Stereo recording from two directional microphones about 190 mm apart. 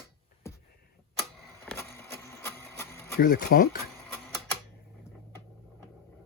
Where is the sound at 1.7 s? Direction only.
15° left (ahead or behind).